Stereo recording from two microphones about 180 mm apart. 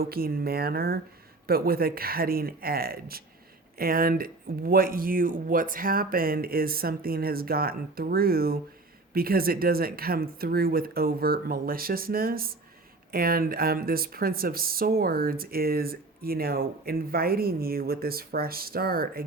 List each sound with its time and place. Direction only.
0.0 s speech: 55° right (ahead or behind)